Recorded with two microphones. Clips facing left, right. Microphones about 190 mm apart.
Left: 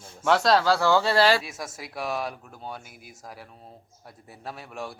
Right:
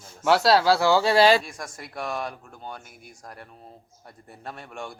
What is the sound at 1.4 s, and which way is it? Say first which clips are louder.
Speech: left 1 dB; 5° left (ahead or behind).